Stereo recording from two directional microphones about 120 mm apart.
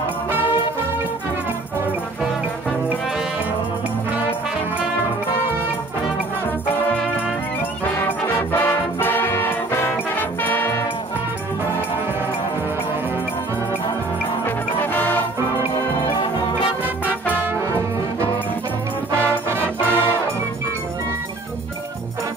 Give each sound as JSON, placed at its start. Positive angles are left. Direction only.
{"t": 8.3, "sound": "music", "side_deg": 20}
{"t": 14.4, "sound": "music", "side_deg": 15}
{"t": 16.8, "sound": "music", "side_deg": 15}
{"t": 17.3, "sound": "music", "side_deg": -20}